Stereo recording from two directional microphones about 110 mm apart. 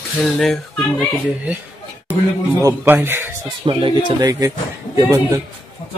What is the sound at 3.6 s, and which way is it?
Speech, 40° right (ahead or behind).